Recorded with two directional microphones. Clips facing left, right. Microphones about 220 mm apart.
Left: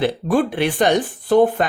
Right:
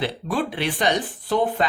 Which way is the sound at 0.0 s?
50° left (ahead or behind).